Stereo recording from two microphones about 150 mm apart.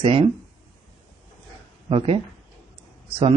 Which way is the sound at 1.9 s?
40° right (ahead or behind).